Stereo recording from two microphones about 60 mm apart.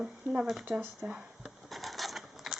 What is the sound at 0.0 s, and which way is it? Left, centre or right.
Speech, centre.